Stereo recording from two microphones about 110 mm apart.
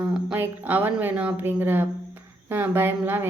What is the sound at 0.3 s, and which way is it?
A woman's voice, 15° right (ahead or behind).